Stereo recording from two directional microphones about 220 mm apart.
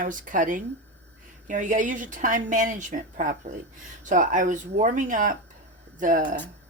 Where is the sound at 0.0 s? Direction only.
35° right (ahead or behind).